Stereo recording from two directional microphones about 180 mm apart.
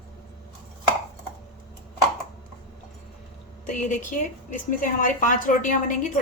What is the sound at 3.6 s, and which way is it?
A woman's voice, 45° left (ahead or behind).